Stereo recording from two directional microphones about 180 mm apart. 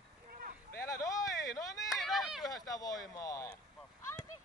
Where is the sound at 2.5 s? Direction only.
20° left (ahead or behind).